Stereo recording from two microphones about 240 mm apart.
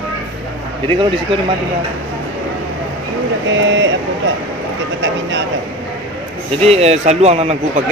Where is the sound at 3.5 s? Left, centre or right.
Right.